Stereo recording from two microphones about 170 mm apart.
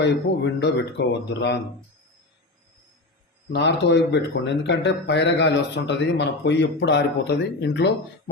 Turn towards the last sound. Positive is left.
turn(degrees=90)